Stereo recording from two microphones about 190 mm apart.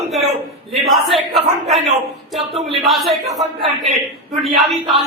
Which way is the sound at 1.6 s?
35° right (ahead or behind).